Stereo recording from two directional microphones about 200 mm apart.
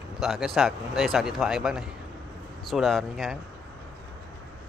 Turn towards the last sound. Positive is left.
turn(degrees=0)  # may be behind; listen again after turning